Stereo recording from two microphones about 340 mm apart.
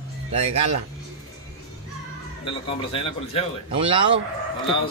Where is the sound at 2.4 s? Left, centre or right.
Centre.